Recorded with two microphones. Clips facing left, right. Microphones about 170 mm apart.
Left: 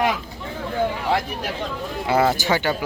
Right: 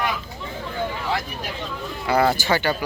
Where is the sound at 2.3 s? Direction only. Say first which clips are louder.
Even; 20° left (ahead or behind).